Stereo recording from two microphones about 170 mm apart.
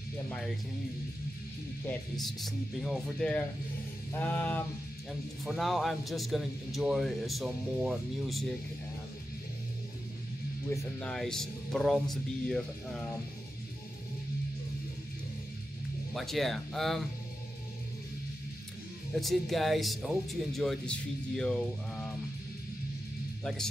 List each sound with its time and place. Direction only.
2.1 s speech: centre (ahead or behind)
4.2 s music: 10° left (ahead or behind)
5.4 s speech: centre (ahead or behind)
10.7 s music: 15° left (ahead or behind)
11.1 s speech: 5° left (ahead or behind)
16.1 s speech: centre (ahead or behind)
19.1 s speech: centre (ahead or behind)